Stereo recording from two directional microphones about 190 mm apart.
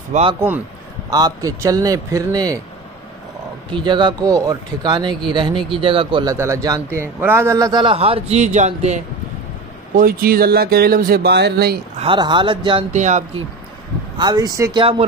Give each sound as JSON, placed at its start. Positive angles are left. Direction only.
{"t": 0.1, "sound": "a man's voice", "side_deg": -30}
{"t": 1.1, "sound": "a man's voice", "side_deg": -20}
{"t": 3.7, "sound": "a man's voice", "side_deg": -25}
{"t": 6.3, "sound": "a man's voice", "side_deg": -15}
{"t": 9.9, "sound": "speech", "side_deg": -50}
{"t": 12.0, "sound": "a man's voice", "side_deg": -25}
{"t": 14.1, "sound": "a man's voice", "side_deg": -20}